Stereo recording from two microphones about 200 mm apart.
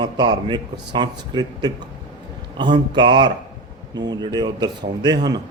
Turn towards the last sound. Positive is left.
turn(degrees=-20)  # may be behind; listen again after turning